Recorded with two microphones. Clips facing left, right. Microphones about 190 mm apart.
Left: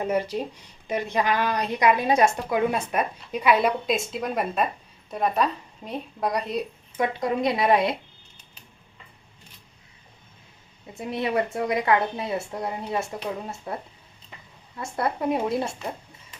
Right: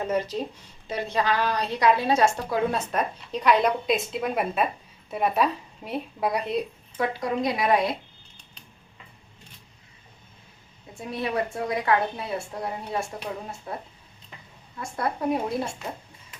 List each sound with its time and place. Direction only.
0.0 s a woman's voice: 10° left (ahead or behind); by 6.7 s 5° right (ahead or behind)
6.9 s a woman's voice: 20° left (ahead or behind)
10.9 s a woman's voice: 20° left (ahead or behind)
14.8 s a woman's voice: 25° left (ahead or behind)